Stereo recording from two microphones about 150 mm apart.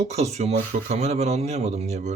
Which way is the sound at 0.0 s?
45° right (ahead or behind).